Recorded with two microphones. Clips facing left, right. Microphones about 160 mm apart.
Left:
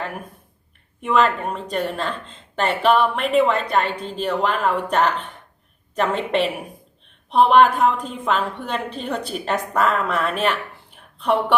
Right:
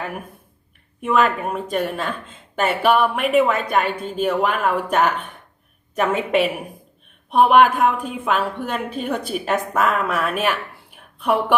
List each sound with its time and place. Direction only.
1.0 s speech: 5° right (ahead or behind)